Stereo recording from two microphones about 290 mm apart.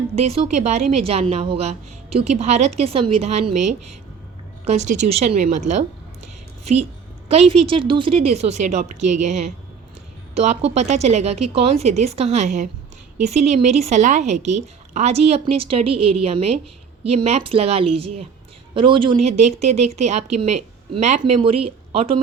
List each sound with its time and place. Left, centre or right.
0.2 s speech: right
4.6 s speech: right
7.3 s speech: right